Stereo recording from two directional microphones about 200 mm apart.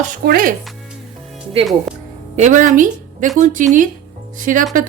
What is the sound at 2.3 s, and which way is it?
A woman's voice, 40° right (ahead or behind).